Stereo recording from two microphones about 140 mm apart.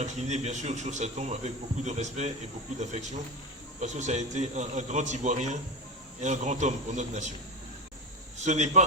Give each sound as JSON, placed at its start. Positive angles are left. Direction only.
{"t": 0.0, "sound": "speech", "side_deg": -55}
{"t": 8.4, "sound": "speech", "side_deg": -55}